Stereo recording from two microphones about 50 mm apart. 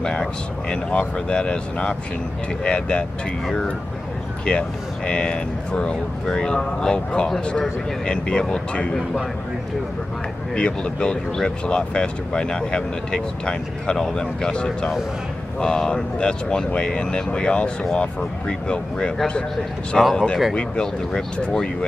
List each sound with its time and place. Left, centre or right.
0.0 s speech: centre
4.5 s speech: centre
10.5 s speech: centre
20.0 s speech: centre
20.5 s speech: centre